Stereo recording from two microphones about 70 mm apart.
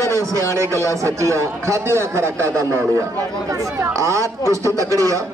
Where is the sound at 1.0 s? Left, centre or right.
Right.